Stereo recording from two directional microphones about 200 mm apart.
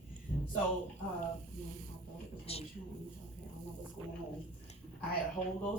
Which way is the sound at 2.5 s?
30° left (ahead or behind).